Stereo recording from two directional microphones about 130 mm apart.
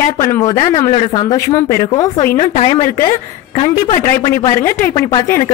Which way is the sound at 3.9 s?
70° left (ahead or behind).